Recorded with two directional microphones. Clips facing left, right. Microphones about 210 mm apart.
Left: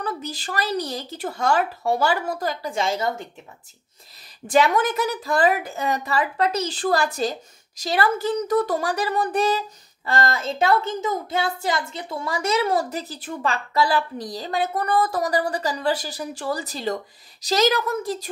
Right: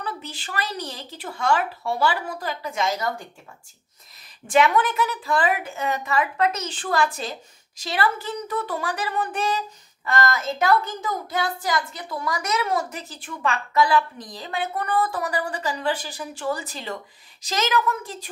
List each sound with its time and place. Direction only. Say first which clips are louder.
0.0 s a woman's voice: left 4 dB; 40° left (ahead or behind)
4.5 s a woman's voice: left 1 dB; 40° left (ahead or behind)